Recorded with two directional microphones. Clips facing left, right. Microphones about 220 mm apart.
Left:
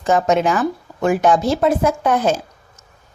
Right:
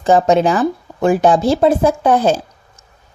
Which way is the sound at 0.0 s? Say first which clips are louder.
Right 4 dB; 30° right (ahead or behind).